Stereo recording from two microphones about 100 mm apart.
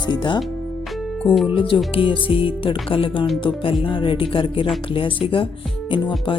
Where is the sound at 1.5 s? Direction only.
65° left (ahead or behind).